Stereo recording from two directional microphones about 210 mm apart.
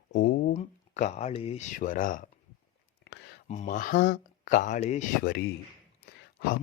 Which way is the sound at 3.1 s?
50° left (ahead or behind).